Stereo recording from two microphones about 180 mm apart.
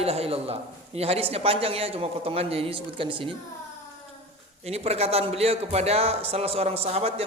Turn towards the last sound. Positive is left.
turn(degrees=-35)  # may be behind; listen again after turning